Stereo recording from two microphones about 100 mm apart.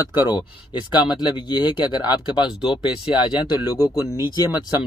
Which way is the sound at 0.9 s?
50° left (ahead or behind).